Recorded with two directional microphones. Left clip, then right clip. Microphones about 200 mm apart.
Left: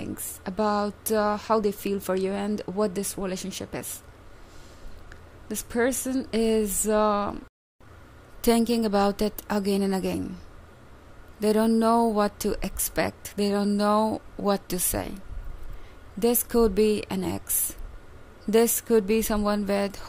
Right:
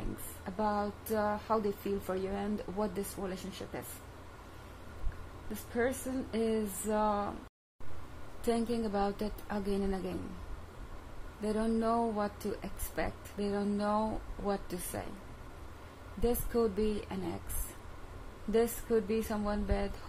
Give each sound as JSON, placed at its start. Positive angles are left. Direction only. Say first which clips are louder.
{"t": 0.4, "sound": "speech", "louder": "left 8 dB", "side_deg": 50}
{"t": 5.5, "sound": "speech", "louder": "left 8 dB", "side_deg": 50}
{"t": 8.4, "sound": "speech", "louder": "left 10 dB", "side_deg": 50}
{"t": 11.4, "sound": "speech", "louder": "left 11 dB", "side_deg": 50}
{"t": 16.2, "sound": "speech", "louder": "left 9 dB", "side_deg": 50}
{"t": 18.5, "sound": "speech", "louder": "left 9 dB", "side_deg": 55}